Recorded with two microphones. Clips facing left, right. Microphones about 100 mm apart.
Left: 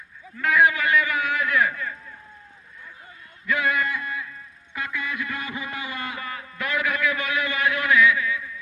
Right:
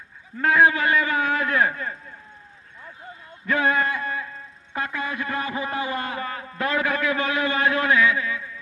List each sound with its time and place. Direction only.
0.3 s a man's voice: 35° right (ahead or behind)
3.4 s a man's voice: 35° right (ahead or behind)